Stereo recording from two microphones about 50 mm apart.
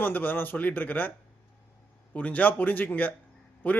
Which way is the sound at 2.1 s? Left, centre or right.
Left.